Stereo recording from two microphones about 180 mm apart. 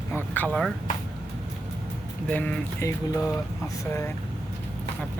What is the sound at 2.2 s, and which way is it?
Speech, 5° left (ahead or behind).